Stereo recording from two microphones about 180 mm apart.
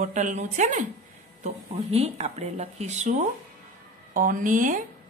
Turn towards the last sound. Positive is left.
turn(degrees=-45)  # may be behind; listen again after turning